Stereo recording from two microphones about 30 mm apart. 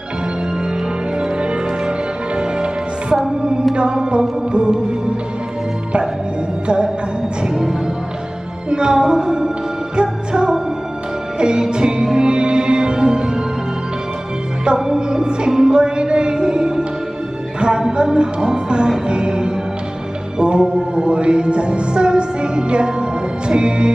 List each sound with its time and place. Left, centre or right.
1.4 s music: right
7.4 s music: centre
8.6 s music: right
14.6 s music: right